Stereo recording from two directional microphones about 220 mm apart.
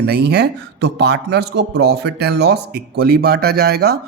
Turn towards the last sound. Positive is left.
turn(degrees=-45)  # may be behind; listen again after turning